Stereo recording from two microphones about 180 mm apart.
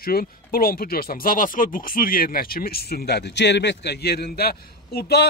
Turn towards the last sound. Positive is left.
turn(degrees=60)  # may be behind; listen again after turning